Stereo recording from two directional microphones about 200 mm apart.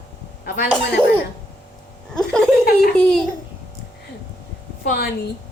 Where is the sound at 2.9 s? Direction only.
5° left (ahead or behind).